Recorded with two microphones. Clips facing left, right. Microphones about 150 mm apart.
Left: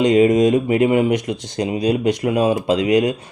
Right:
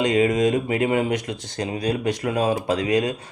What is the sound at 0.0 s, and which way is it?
Speech, 20° left (ahead or behind).